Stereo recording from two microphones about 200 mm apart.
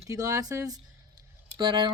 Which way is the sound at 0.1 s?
15° right (ahead or behind).